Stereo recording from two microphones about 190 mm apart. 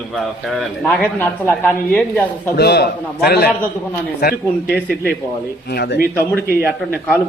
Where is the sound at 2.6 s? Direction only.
60° left (ahead or behind).